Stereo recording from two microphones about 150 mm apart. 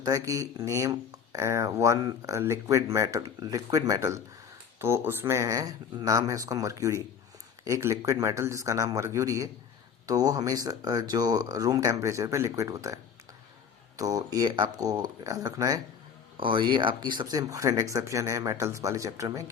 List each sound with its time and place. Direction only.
0.0 s speech: 20° right (ahead or behind)